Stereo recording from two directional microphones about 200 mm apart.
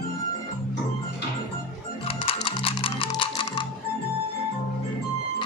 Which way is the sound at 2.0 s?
30° left (ahead or behind).